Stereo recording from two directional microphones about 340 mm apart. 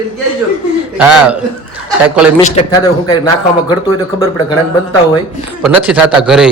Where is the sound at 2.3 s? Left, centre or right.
Centre.